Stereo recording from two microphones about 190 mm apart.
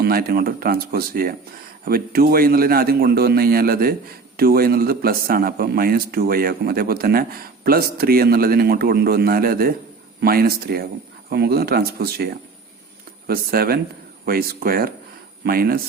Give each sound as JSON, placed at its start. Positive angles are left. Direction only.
{"t": 0.0, "sound": "a man's voice", "side_deg": -50}